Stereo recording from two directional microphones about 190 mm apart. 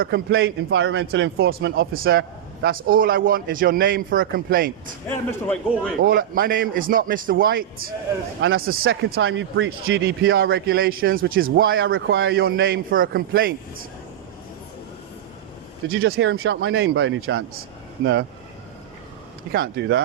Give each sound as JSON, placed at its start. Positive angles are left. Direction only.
{"t": 0.0, "sound": "speech", "side_deg": -60}
{"t": 1.5, "sound": "speech", "side_deg": -65}
{"t": 1.9, "sound": "a man's voice", "side_deg": -55}
{"t": 5.0, "sound": "a man's voice", "side_deg": 10}
{"t": 6.0, "sound": "a man's voice", "side_deg": -50}
{"t": 8.9, "sound": "a man's voice", "side_deg": -90}
{"t": 11.9, "sound": "a man's voice", "side_deg": -70}
{"t": 16.0, "sound": "speech", "side_deg": -90}
{"t": 18.0, "sound": "speech", "side_deg": -60}
{"t": 19.5, "sound": "speech", "side_deg": -60}